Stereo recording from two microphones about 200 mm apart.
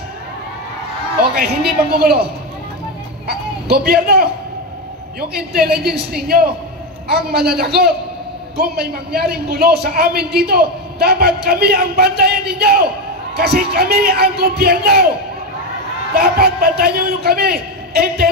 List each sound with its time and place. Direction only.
1.2 s a sound: 50° right (ahead or behind)
1.9 s a man's voice: 50° right (ahead or behind)
3.3 s a man's voice: 50° right (ahead or behind)
5.5 s a man's voice: 50° right (ahead or behind)
16.2 s a man's voice: 50° right (ahead or behind)